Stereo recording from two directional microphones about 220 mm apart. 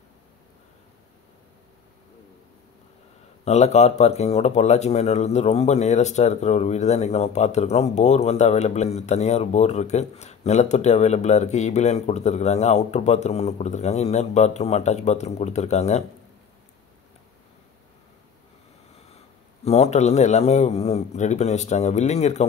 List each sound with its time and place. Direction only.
3.4 s speech: 30° left (ahead or behind)
19.6 s speech: 30° left (ahead or behind)